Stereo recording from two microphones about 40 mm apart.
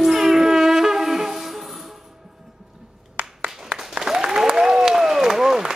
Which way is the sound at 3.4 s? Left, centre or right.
Right.